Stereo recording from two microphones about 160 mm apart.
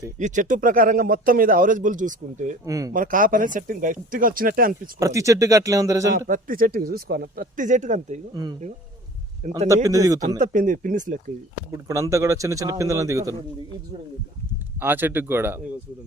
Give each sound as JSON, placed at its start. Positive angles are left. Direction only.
{"t": 0.2, "sound": "speech", "side_deg": -50}
{"t": 2.6, "sound": "a man's voice", "side_deg": -20}
{"t": 2.9, "sound": "speech", "side_deg": -55}
{"t": 4.9, "sound": "a man's voice", "side_deg": -20}
{"t": 6.2, "sound": "speech", "side_deg": -60}
{"t": 9.6, "sound": "a man's voice", "side_deg": -20}
{"t": 10.4, "sound": "speech", "side_deg": -55}
{"t": 11.7, "sound": "a man's voice", "side_deg": -20}
{"t": 14.8, "sound": "speech", "side_deg": -10}